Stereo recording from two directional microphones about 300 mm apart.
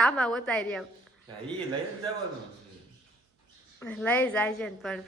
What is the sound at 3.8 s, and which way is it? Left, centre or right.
A woman's voice, centre.